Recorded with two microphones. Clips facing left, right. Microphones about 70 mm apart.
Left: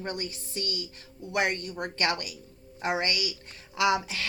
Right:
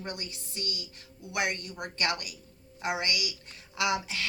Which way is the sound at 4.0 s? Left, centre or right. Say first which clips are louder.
Left 2 dB; left.